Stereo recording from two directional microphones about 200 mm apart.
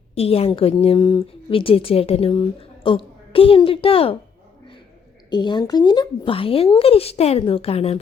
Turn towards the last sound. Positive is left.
turn(degrees=30)  # may be behind; listen again after turning